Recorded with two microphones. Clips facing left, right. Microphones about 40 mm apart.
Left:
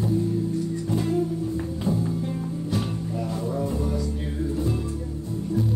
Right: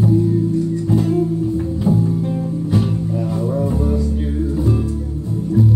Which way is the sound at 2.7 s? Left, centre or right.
Centre.